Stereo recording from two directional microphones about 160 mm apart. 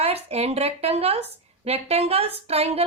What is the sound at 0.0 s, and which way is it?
A woman's voice, 40° right (ahead or behind).